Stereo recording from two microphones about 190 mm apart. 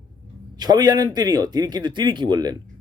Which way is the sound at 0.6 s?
20° right (ahead or behind).